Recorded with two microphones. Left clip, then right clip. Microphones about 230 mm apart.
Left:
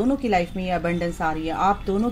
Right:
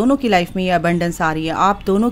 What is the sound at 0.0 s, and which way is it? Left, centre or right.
Speech, right.